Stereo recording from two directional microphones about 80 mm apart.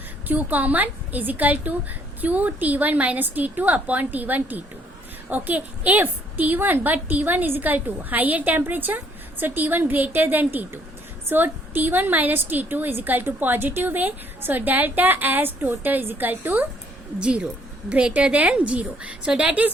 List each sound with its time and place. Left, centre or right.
0.3 s a woman's voice: right